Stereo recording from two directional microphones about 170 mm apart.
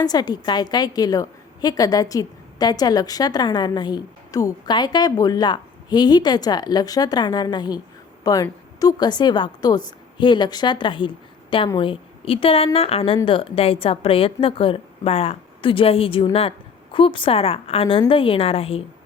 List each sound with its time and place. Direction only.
0.0 s a woman's voice: 25° left (ahead or behind)